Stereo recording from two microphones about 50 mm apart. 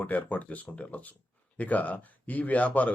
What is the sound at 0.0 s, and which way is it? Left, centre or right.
Speech, left.